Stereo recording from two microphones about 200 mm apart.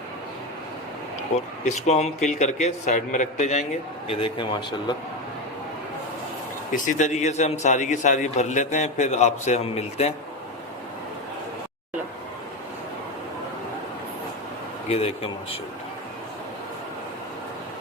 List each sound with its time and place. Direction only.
1.6 s a man's voice: 35° left (ahead or behind)
4.1 s speech: 25° left (ahead or behind)
6.7 s a man's voice: 40° left (ahead or behind)
14.8 s a man's voice: 30° left (ahead or behind)